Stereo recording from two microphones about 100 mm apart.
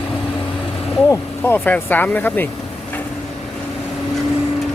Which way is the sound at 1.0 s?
25° left (ahead or behind).